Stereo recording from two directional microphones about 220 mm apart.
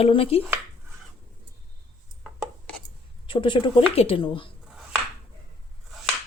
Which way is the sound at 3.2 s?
20° left (ahead or behind).